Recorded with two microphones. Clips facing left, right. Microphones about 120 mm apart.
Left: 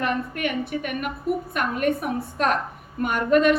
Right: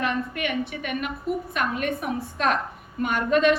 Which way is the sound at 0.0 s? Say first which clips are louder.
Left 1 dB; 45° left (ahead or behind).